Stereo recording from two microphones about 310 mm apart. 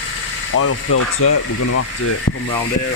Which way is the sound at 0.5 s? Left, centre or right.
Left.